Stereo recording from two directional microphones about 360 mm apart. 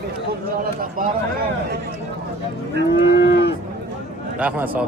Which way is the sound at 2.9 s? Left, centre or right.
Left.